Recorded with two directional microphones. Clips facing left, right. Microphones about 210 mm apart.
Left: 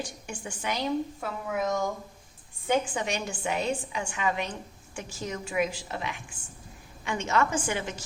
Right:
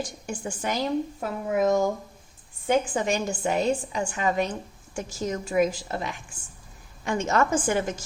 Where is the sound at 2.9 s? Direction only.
45° right (ahead or behind).